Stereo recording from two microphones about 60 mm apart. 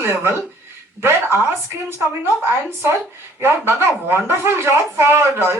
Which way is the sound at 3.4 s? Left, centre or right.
Right.